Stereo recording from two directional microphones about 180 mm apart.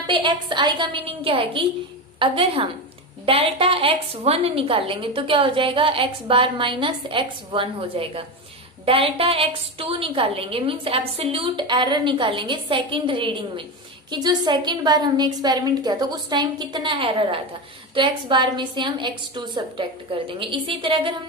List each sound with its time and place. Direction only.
0.1 s a woman's voice: 25° right (ahead or behind)